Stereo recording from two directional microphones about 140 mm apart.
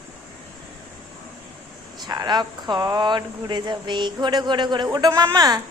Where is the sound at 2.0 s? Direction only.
30° right (ahead or behind).